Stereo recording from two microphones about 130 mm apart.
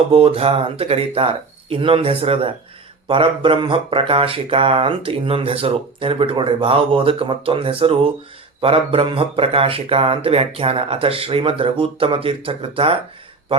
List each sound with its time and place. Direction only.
0.1 s speech: 45° right (ahead or behind)